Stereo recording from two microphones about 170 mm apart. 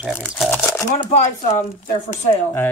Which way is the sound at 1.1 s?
45° left (ahead or behind).